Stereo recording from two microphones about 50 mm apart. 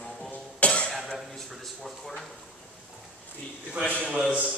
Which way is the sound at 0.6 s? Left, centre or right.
Left.